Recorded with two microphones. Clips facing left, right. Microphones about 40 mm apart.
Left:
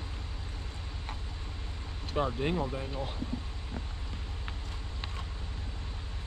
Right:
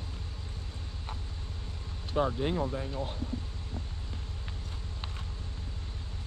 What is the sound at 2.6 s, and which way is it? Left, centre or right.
Speech, centre.